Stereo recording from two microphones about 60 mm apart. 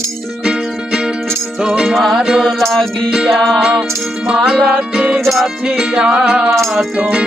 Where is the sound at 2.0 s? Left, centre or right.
Centre.